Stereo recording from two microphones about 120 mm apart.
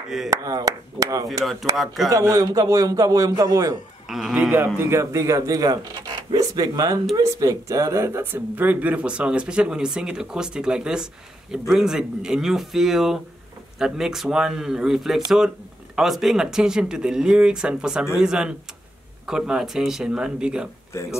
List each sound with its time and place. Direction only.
0.3 s a man's voice: 30° right (ahead or behind)
1.4 s speech: centre (ahead or behind)
2.0 s a man's voice: 25° right (ahead or behind)
4.1 s speech: 5° right (ahead or behind)
4.7 s a man's voice: 20° right (ahead or behind)